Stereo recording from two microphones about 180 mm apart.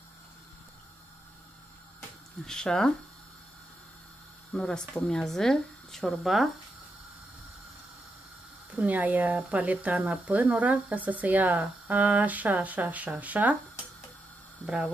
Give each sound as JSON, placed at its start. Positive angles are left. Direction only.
{"t": 2.4, "sound": "speech", "side_deg": 5}
{"t": 4.5, "sound": "speech", "side_deg": 5}
{"t": 8.7, "sound": "speech", "side_deg": -10}